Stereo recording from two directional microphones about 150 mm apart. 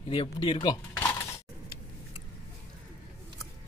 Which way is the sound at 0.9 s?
15° left (ahead or behind).